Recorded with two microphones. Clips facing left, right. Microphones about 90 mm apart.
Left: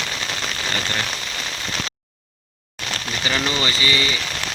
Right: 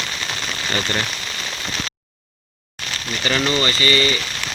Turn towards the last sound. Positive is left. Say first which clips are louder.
# right 3 dB
turn(degrees=10)  # may be behind; listen again after turning